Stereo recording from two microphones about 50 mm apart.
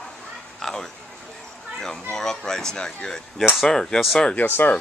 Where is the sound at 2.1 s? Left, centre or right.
Centre.